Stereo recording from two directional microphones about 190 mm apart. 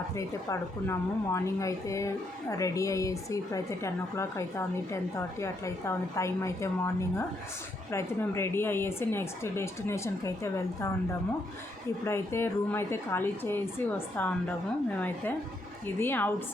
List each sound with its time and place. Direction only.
0.2 s a woman's voice: 15° left (ahead or behind)
12.0 s a woman's voice: 15° left (ahead or behind)
16.0 s a woman's voice: 10° left (ahead or behind)